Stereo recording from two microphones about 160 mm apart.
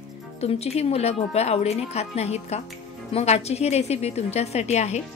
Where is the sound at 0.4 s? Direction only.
40° left (ahead or behind).